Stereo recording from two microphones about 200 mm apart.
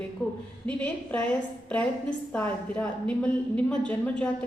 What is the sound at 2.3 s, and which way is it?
A woman's voice, 5° left (ahead or behind).